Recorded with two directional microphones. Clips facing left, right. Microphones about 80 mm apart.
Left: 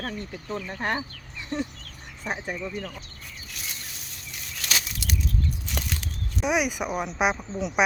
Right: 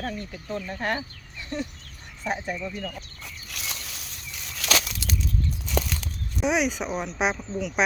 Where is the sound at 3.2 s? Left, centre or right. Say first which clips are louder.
Right 2 dB; right.